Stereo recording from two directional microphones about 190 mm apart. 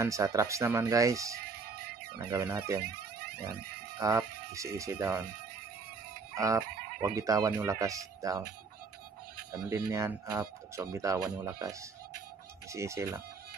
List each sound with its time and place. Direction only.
0.0 s speech: 15° right (ahead or behind)
4.0 s speech: 15° right (ahead or behind)
6.3 s speech: 15° right (ahead or behind)
9.5 s speech: 15° right (ahead or behind)